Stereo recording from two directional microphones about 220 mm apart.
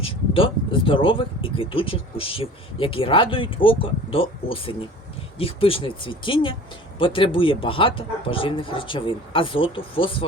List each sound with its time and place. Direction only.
0.0 s speech: 25° left (ahead or behind)